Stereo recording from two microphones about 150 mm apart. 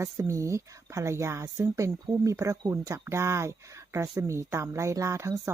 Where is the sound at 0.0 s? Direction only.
20° right (ahead or behind).